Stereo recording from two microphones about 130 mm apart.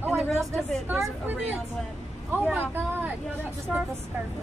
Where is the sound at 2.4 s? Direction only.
10° right (ahead or behind).